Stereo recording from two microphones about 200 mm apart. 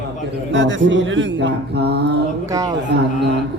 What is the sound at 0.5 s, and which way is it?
Speech, 65° right (ahead or behind).